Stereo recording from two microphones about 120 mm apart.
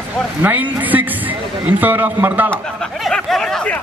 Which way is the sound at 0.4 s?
15° right (ahead or behind).